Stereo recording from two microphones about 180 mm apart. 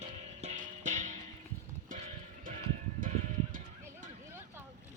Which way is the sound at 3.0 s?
45° right (ahead or behind).